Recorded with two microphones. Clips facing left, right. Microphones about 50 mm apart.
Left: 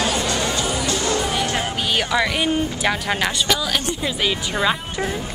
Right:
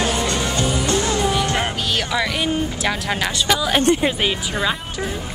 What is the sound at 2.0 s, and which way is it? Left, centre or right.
Speech, centre.